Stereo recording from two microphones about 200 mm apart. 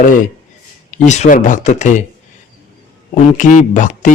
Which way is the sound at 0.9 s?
35° left (ahead or behind).